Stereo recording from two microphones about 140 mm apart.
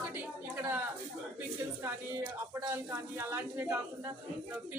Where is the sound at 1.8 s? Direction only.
15° right (ahead or behind).